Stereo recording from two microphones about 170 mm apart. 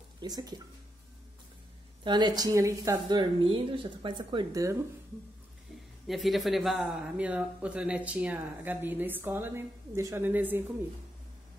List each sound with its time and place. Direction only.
0.2 s speech: 25° right (ahead or behind)
2.0 s speech: 25° right (ahead or behind)
6.0 s speech: centre (ahead or behind)